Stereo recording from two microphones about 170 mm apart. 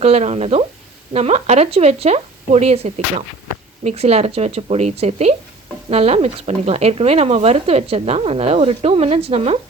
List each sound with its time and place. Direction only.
0.0 s speech: 40° right (ahead or behind)